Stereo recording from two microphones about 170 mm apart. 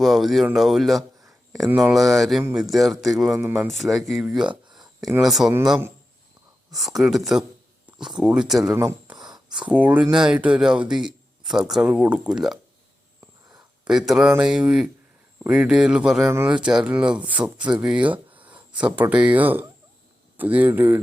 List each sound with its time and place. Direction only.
0.0 s speech: centre (ahead or behind)
6.7 s speech: centre (ahead or behind)
7.9 s a sound: 5° right (ahead or behind)
8.2 s speech: 5° right (ahead or behind)
8.7 s speech: 15° right (ahead or behind)
9.3 s a sound: 25° right (ahead or behind)
9.6 s speech: 10° right (ahead or behind)
13.8 s speech: 5° right (ahead or behind)